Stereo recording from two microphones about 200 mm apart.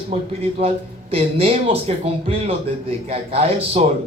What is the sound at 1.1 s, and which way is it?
A man's voice, 30° right (ahead or behind).